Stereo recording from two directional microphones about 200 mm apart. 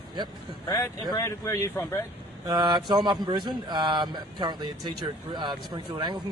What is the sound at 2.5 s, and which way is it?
A man's voice, 20° right (ahead or behind).